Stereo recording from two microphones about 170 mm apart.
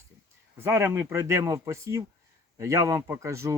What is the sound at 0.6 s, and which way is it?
Speech, 15° right (ahead or behind).